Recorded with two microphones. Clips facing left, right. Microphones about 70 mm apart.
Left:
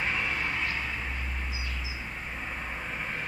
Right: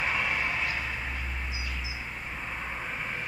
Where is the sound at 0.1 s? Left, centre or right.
Right.